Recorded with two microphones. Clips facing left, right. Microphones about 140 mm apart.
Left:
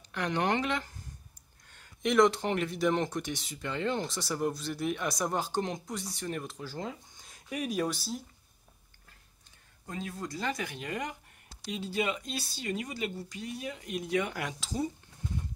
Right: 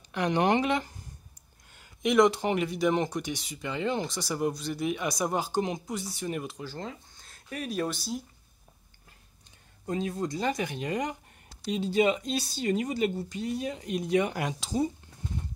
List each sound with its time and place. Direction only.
0.1 s speech: 15° right (ahead or behind); by 8.2 s 5° left (ahead or behind)
9.8 s speech: 25° right (ahead or behind)